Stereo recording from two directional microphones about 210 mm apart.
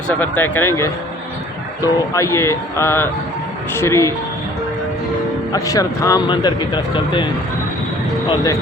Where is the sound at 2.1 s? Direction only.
15° left (ahead or behind).